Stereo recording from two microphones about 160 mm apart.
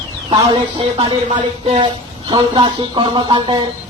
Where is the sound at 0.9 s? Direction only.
35° right (ahead or behind).